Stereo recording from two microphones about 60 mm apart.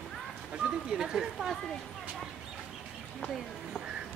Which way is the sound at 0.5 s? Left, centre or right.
Centre.